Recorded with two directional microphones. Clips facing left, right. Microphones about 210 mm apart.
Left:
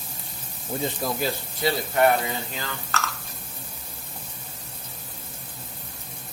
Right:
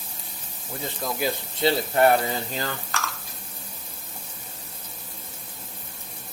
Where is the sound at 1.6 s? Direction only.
25° right (ahead or behind).